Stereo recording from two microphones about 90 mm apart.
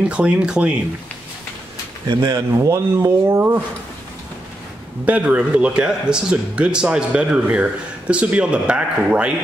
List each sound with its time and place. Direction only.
0.1 s a man's voice: 15° right (ahead or behind)
2.0 s speech: 45° right (ahead or behind); by 3.6 s 30° right (ahead or behind)
5.0 s a man's voice: 15° right (ahead or behind)